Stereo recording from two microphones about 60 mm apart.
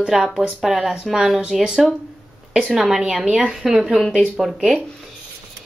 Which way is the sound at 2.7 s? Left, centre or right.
Centre.